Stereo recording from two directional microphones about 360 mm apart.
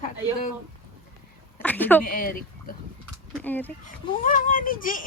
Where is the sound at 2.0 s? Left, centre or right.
Left.